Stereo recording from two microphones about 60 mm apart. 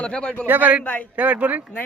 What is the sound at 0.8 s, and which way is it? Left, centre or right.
Speech, left.